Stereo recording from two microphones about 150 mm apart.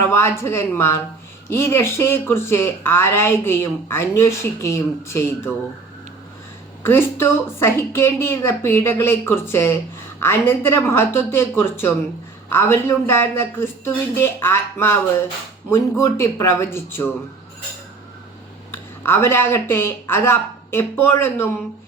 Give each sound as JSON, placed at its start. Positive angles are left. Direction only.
{"t": 0.1, "sound": "speech", "side_deg": 15}
{"t": 6.8, "sound": "speech", "side_deg": 15}
{"t": 19.0, "sound": "speech", "side_deg": 15}